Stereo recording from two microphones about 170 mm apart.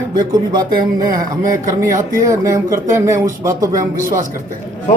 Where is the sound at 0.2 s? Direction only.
25° right (ahead or behind).